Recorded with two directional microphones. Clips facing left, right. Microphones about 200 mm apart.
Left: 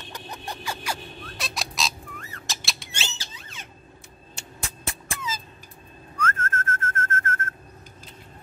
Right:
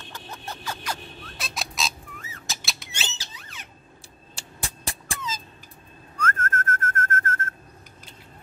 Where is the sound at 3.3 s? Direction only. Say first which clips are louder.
Left 1 dB; 25° left (ahead or behind).